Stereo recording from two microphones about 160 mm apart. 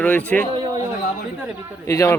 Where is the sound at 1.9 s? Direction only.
20° left (ahead or behind).